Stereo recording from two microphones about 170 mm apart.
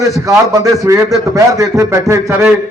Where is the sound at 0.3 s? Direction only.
20° right (ahead or behind).